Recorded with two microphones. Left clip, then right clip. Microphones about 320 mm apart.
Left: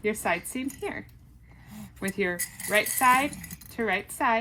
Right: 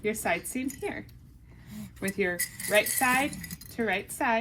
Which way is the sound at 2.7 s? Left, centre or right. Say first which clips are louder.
Left 3 dB; left.